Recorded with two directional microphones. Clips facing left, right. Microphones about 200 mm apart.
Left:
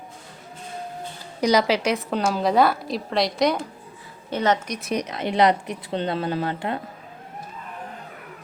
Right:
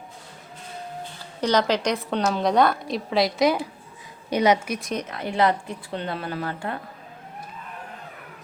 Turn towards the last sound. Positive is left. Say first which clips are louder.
# left 4 dB
turn(degrees=20)  # may be behind; listen again after turning